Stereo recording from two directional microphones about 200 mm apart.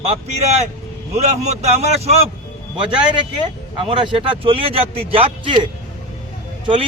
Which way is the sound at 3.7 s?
25° right (ahead or behind).